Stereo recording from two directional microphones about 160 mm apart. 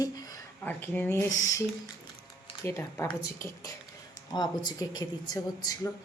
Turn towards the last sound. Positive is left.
turn(degrees=25)  # may be behind; listen again after turning